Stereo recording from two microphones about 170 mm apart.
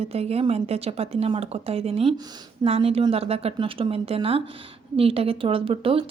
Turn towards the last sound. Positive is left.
turn(degrees=-30)  # may be behind; listen again after turning